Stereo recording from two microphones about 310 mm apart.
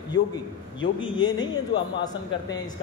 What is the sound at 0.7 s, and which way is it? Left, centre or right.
Speech, centre.